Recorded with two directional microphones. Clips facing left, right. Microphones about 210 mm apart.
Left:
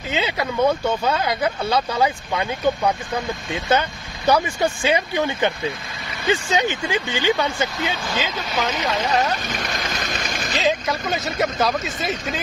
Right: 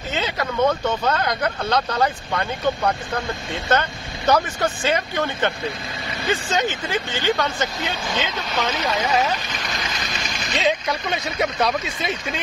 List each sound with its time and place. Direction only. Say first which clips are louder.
0.1 s speech: left 2 dB; 10° left (ahead or behind)
9.7 s a sound: left 2 dB; 50° left (ahead or behind)
10.6 s speech: even; centre (ahead or behind)